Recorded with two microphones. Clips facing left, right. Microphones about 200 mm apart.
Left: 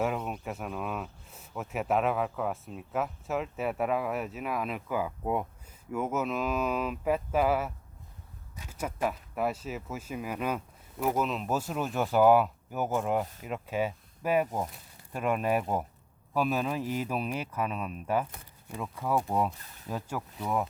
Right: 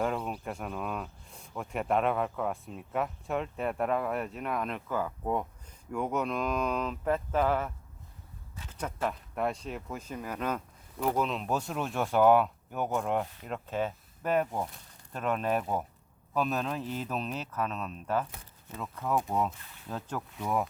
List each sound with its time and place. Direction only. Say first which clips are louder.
0.2 s speech: even; centre (ahead or behind)
19.5 s speech: left 1 dB; 40° left (ahead or behind)
19.9 s speech: left 2 dB; 10° left (ahead or behind)